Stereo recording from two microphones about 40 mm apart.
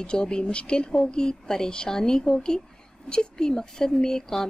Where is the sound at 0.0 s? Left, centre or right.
Left.